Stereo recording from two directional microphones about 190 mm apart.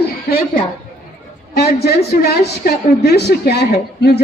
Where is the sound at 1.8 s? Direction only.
55° left (ahead or behind).